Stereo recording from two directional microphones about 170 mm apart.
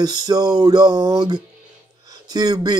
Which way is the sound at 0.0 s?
25° right (ahead or behind).